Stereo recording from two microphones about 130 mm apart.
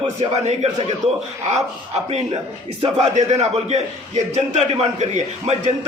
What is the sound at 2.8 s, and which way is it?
A man's voice, 55° right (ahead or behind).